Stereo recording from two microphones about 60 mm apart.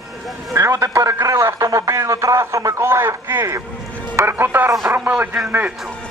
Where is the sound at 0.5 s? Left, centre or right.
Right.